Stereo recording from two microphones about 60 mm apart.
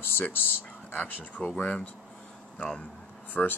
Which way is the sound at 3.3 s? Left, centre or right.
Left.